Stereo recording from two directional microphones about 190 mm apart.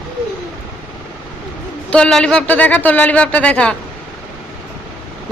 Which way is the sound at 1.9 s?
5° left (ahead or behind).